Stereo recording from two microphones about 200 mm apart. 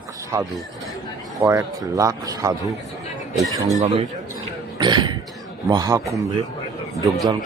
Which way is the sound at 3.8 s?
30° right (ahead or behind).